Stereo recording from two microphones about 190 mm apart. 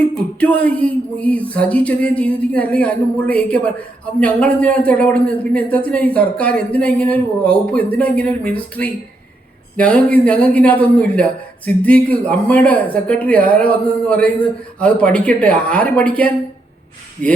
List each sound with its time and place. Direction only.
0.1 s speech: 5° left (ahead or behind)